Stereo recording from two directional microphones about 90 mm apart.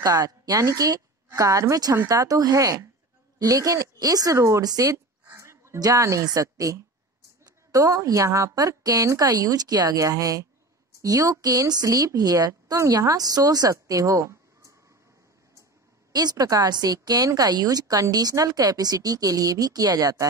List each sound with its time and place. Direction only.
0.0 s a woman's voice: 40° right (ahead or behind)
16.1 s a woman's voice: 45° right (ahead or behind)